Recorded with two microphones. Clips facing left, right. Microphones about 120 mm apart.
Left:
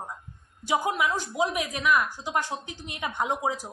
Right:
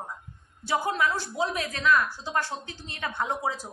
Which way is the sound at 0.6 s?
15° left (ahead or behind).